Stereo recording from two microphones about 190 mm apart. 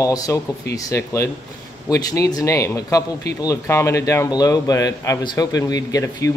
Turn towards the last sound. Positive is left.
turn(degrees=15)  # may be behind; listen again after turning